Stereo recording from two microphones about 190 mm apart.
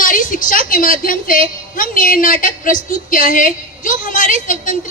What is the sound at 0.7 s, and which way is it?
A woman's voice, 45° left (ahead or behind).